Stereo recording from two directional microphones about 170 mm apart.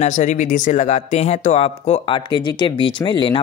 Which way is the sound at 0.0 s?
45° left (ahead or behind).